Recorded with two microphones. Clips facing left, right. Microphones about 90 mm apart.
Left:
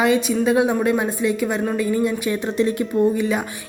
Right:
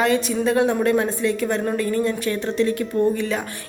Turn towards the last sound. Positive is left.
turn(degrees=15)  # may be behind; listen again after turning